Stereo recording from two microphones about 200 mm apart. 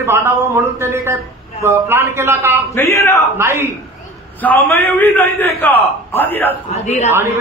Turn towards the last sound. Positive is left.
turn(degrees=-10)  # may be behind; listen again after turning